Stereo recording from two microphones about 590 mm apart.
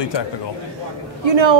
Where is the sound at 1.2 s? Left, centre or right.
Right.